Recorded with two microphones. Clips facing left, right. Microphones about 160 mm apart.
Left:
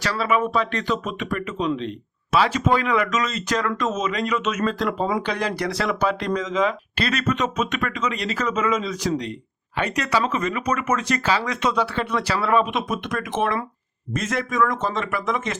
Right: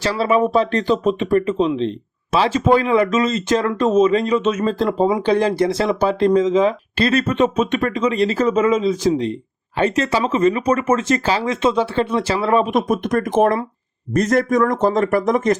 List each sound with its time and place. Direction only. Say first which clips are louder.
0.0 s speech: right 5 dB; 30° right (ahead or behind)
12.9 s speech: right 8 dB; 45° right (ahead or behind)